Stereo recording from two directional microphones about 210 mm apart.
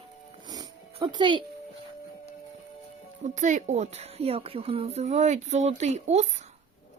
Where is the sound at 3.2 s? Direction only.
35° right (ahead or behind).